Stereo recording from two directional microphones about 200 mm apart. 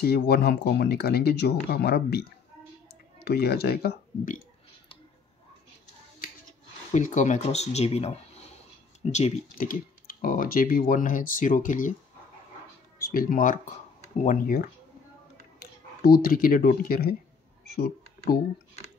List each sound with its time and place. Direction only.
0.0 s speech: 50° left (ahead or behind)
6.9 s speech: 35° left (ahead or behind)
13.1 s speech: 45° left (ahead or behind)